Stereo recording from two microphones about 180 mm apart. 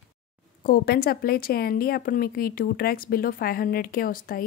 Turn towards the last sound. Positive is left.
turn(degrees=55)  # may be behind; listen again after turning